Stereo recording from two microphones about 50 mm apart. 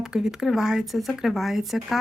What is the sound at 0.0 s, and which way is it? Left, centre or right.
Speech, centre.